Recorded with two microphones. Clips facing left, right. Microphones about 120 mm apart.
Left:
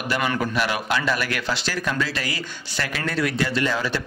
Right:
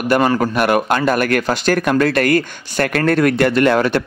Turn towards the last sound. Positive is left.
turn(degrees=-60)  # may be behind; listen again after turning